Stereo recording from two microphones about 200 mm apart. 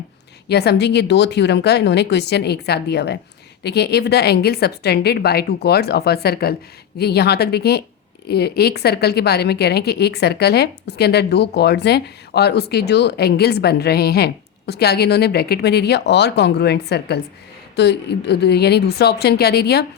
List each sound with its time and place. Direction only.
0.4 s a woman's voice: 55° left (ahead or behind)